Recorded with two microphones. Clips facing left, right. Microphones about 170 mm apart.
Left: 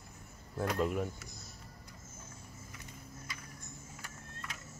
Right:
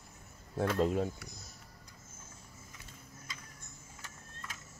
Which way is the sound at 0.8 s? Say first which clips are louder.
Right 3 dB; 30° right (ahead or behind).